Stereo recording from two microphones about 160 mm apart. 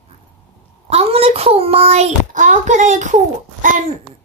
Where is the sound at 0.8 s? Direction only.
40° right (ahead or behind).